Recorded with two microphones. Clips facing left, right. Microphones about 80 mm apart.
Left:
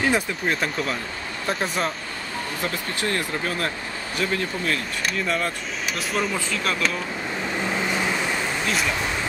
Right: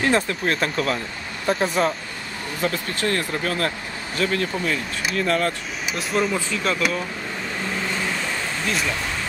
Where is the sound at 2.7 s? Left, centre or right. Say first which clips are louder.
Right 2 dB; centre.